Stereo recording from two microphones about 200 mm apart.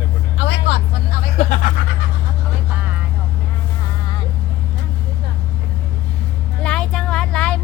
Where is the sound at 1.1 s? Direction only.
40° left (ahead or behind).